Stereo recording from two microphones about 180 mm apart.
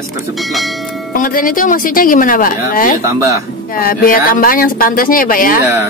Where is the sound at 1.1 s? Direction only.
50° left (ahead or behind).